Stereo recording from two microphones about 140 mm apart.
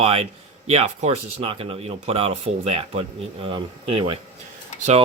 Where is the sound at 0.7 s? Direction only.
45° right (ahead or behind).